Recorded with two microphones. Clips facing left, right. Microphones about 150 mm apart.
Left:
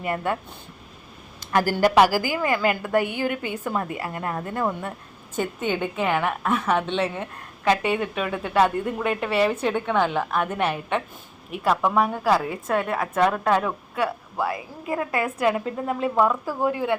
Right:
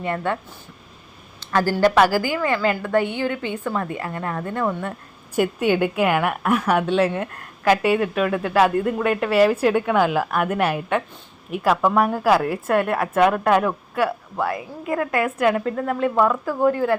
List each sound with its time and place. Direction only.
1.5 s a woman's voice: 15° left (ahead or behind)
5.3 s a woman's voice: 10° right (ahead or behind)